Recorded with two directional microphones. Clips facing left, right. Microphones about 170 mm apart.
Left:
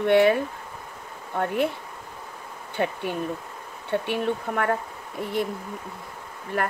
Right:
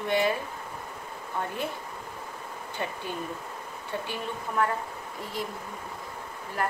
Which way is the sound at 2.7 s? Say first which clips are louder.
Left 8 dB; 65° left (ahead or behind).